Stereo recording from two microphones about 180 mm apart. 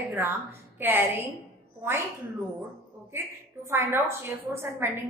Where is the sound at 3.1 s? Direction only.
15° right (ahead or behind).